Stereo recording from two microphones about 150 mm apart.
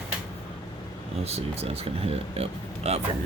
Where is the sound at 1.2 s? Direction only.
45° right (ahead or behind).